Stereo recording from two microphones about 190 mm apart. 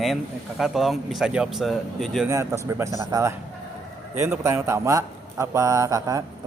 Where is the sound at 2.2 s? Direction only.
15° right (ahead or behind).